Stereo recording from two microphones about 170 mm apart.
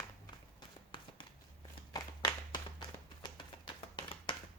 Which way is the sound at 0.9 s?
30° left (ahead or behind).